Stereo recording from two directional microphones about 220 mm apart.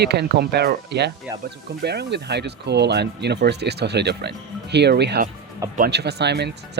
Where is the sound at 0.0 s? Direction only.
50° right (ahead or behind).